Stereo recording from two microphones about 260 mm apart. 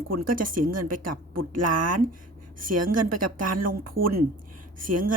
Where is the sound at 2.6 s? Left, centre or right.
Right.